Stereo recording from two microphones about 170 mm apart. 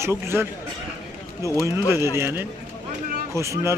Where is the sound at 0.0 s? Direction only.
15° right (ahead or behind).